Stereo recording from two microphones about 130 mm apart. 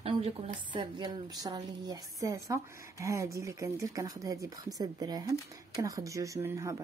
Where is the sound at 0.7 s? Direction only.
35° right (ahead or behind).